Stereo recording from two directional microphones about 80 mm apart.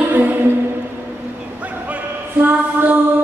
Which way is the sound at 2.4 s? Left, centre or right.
Right.